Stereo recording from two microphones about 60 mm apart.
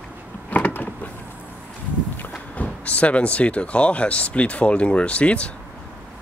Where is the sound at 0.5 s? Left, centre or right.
Left.